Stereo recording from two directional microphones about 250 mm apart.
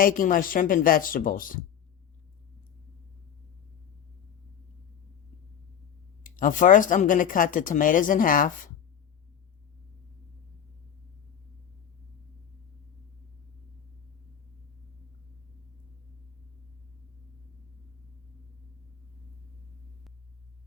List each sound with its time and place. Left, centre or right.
0.0 s speech: left
6.2 s speech: left